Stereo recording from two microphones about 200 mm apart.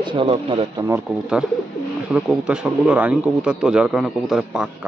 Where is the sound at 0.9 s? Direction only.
5° right (ahead or behind).